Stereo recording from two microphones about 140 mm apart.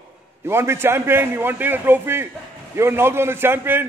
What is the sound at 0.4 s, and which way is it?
A man's voice, 20° right (ahead or behind).